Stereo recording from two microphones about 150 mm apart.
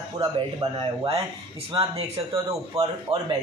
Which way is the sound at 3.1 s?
40° right (ahead or behind).